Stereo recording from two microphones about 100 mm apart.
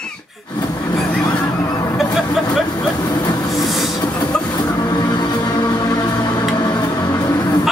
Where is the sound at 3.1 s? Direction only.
45° left (ahead or behind).